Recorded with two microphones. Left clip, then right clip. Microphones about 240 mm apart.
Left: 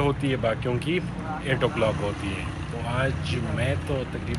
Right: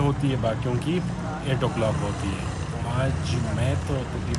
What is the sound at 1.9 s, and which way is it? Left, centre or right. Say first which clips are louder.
Speech: even; right.